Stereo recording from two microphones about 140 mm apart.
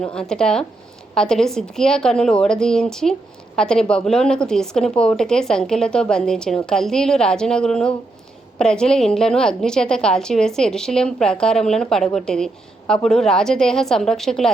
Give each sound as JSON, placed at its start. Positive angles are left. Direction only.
{"t": 0.0, "sound": "a woman's voice", "side_deg": 5}